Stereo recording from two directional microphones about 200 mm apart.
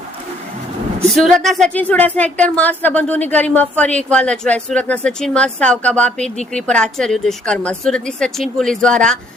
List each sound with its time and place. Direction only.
1.1 s a woman's voice: centre (ahead or behind)